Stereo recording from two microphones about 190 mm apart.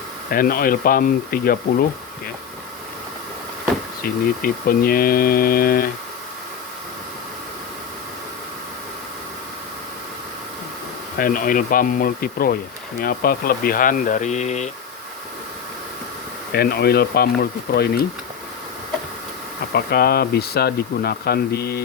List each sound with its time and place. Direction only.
0.3 s speech: 50° left (ahead or behind)
4.0 s speech: 50° left (ahead or behind)
11.2 s speech: 50° left (ahead or behind)
16.5 s speech: 55° left (ahead or behind)
19.7 s speech: 55° left (ahead or behind)